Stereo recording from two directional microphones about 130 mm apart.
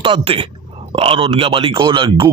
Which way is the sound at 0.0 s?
40° right (ahead or behind).